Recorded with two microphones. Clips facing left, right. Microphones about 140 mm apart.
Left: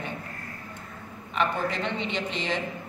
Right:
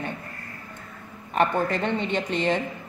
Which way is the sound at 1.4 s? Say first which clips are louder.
Right 4 dB; 50° right (ahead or behind).